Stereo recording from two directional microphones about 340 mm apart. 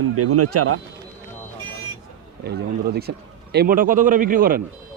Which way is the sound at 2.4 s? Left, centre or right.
Right.